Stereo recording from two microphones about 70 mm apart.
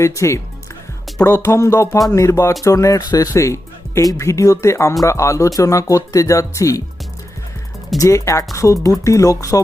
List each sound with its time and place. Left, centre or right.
0.0 s speech: left
3.0 s speech: left
3.3 s music: left
4.0 s speech: left
7.9 s speech: left